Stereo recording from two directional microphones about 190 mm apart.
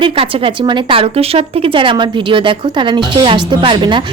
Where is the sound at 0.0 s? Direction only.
25° right (ahead or behind).